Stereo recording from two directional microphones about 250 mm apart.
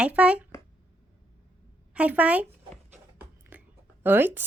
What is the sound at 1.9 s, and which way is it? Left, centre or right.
Writing, centre.